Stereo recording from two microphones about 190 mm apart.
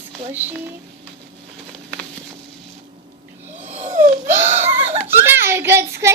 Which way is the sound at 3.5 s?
10° right (ahead or behind).